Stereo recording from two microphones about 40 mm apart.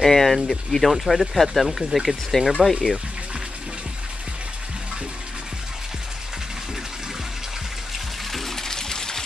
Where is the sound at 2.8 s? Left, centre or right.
Right.